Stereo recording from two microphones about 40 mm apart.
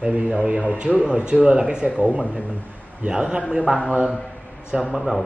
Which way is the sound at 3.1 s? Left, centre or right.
Right.